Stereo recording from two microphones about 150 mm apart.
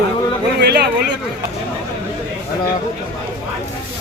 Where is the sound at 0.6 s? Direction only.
90° right.